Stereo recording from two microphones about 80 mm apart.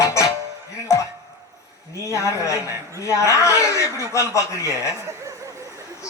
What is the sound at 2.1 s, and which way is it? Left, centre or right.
Speech, left.